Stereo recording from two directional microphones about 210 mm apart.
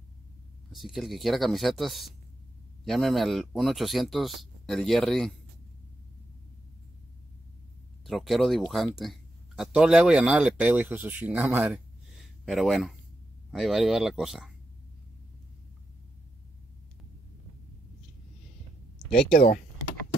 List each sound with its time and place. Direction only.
0.7 s speech: centre (ahead or behind)
8.1 s speech: centre (ahead or behind)
19.3 s speech: 45° left (ahead or behind)